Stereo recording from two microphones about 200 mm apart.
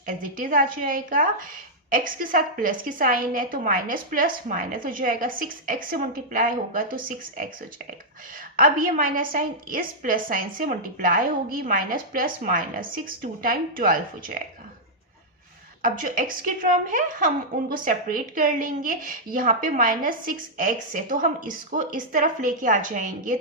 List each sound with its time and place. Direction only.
0.0 s a woman's voice: 45° right (ahead or behind)
8.5 s a woman's voice: 45° right (ahead or behind)
15.8 s a woman's voice: 40° right (ahead or behind)